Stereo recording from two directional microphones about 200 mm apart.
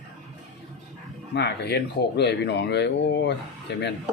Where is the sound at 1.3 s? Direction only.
55° left (ahead or behind).